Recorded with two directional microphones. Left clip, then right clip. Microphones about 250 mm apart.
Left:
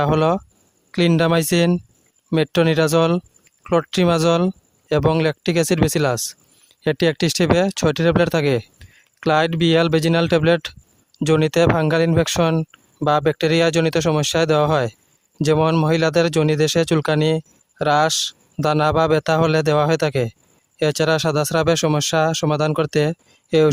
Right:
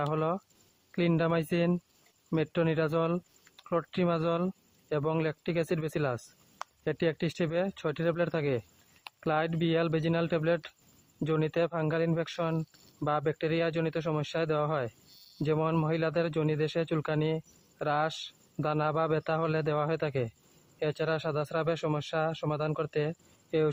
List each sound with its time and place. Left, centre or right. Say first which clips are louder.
0.0 s speech: left 13 dB; left